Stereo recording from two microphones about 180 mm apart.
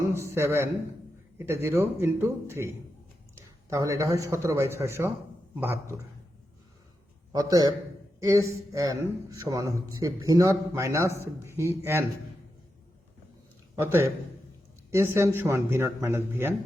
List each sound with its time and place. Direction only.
0.1 s a man's voice: 15° right (ahead or behind)
3.7 s speech: 15° right (ahead or behind)
7.3 s a man's voice: 20° right (ahead or behind)
13.7 s speech: 15° right (ahead or behind)